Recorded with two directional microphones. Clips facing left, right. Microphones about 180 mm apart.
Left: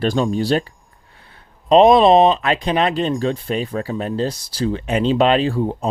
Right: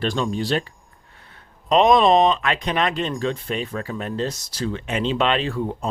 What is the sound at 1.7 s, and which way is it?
Speech, 35° left (ahead or behind).